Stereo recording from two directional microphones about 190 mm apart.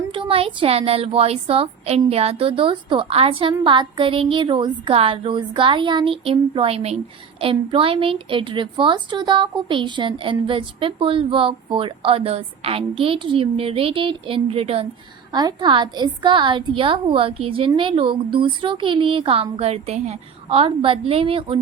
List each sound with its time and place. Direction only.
0.1 s a woman's voice: 30° right (ahead or behind)